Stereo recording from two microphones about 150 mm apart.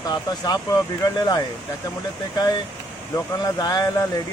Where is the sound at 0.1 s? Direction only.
25° left (ahead or behind).